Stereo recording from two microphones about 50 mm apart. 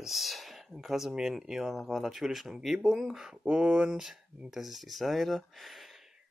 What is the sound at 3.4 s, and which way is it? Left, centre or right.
Speech, right.